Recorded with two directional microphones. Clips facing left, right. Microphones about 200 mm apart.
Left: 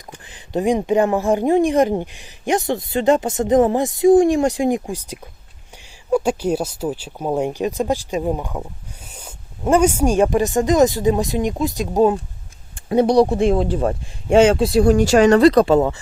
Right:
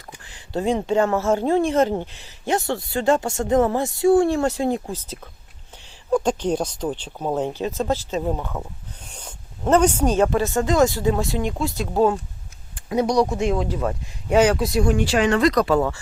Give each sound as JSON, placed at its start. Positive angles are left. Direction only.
{"t": 0.3, "sound": "speech", "side_deg": 20}
{"t": 12.7, "sound": "speech", "side_deg": 30}